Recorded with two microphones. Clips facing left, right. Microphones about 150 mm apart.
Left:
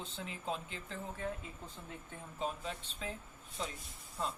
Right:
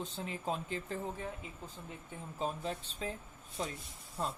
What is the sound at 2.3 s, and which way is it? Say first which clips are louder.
Speech: right 2 dB; 35° right (ahead or behind).